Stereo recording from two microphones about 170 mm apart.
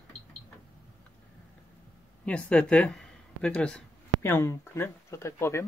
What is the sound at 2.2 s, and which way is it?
Speech, 5° left (ahead or behind).